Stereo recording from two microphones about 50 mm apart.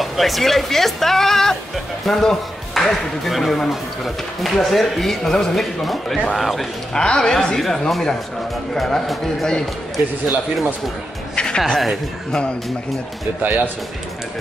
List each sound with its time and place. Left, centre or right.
0.0 s speech: centre
6.9 s a woman's voice: centre
11.3 s music: centre
13.4 s speech: right